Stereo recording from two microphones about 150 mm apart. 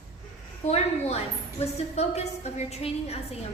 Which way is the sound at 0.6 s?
45° left (ahead or behind).